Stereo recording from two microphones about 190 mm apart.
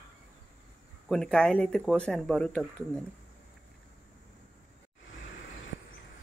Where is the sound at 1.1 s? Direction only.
5° left (ahead or behind).